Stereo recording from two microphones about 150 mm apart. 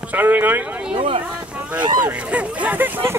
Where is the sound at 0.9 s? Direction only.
40° right (ahead or behind).